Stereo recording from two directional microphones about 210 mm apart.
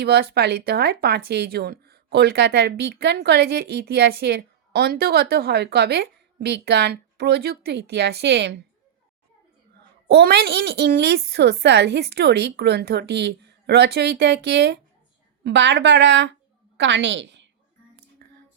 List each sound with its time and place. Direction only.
0.0 s speech: 50° right (ahead or behind)
10.1 s a woman's voice: 50° right (ahead or behind)
18.2 s music: 45° right (ahead or behind)